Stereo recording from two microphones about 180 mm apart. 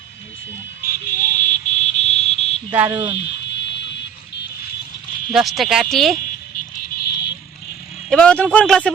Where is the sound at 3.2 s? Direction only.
70° left (ahead or behind).